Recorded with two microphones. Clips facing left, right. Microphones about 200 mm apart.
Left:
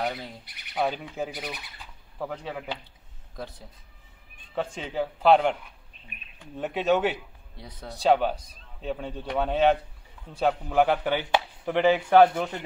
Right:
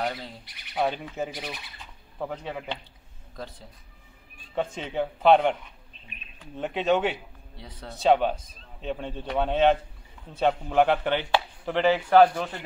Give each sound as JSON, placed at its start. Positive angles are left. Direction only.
{"t": 0.0, "sound": "a man's voice", "side_deg": 5}
{"t": 4.6, "sound": "a man's voice", "side_deg": 5}